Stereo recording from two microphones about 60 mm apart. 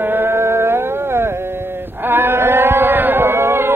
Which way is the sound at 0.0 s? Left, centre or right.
Right.